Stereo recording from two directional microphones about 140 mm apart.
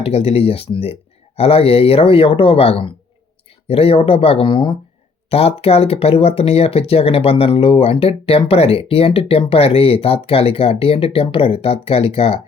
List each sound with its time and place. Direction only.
0.0 s speech: 45° left (ahead or behind)
5.3 s speech: 45° left (ahead or behind)